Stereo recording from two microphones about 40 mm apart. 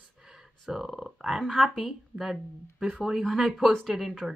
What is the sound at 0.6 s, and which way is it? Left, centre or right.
Speech, centre.